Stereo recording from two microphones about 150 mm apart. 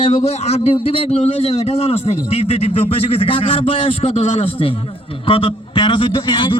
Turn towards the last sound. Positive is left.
turn(degrees=30)  # may be behind; listen again after turning